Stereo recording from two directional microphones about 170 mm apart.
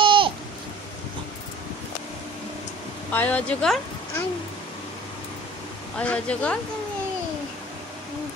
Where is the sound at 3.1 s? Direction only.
10° left (ahead or behind).